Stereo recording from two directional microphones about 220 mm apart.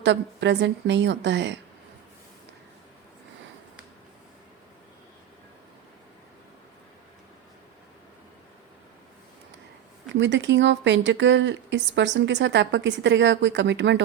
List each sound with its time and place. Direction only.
0.0 s a woman's voice: 55° right (ahead or behind)
10.2 s speech: 55° right (ahead or behind)